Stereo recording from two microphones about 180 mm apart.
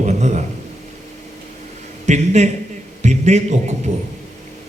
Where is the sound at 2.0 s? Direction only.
40° right (ahead or behind).